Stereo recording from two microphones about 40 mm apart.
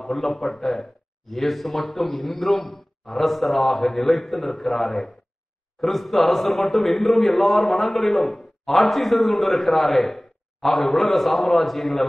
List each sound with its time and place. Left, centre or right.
0.0 s a man's voice: centre